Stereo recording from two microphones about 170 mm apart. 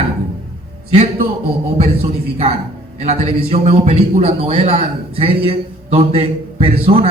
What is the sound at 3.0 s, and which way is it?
A man's voice, 40° right (ahead or behind).